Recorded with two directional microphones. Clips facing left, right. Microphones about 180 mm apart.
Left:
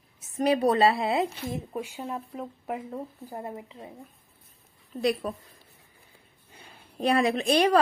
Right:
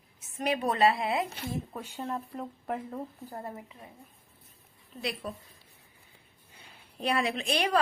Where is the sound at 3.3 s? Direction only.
20° left (ahead or behind).